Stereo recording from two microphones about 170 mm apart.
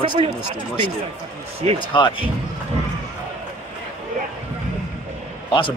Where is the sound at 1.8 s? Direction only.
30° left (ahead or behind).